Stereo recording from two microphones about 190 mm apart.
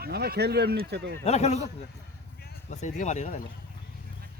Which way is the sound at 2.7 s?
40° left (ahead or behind).